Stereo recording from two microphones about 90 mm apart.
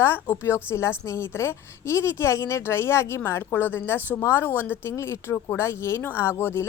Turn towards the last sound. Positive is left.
turn(degrees=25)  # may be behind; listen again after turning